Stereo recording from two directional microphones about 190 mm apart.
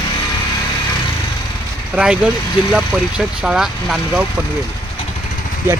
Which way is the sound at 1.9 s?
5° right (ahead or behind).